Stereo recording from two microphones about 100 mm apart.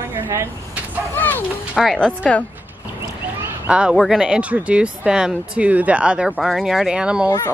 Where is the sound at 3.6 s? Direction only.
10° right (ahead or behind).